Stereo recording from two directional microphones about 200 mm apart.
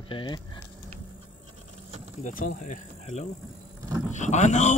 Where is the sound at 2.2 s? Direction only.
40° left (ahead or behind).